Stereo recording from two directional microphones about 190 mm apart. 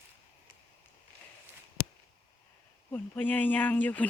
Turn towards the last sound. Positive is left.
turn(degrees=10)  # may be behind; listen again after turning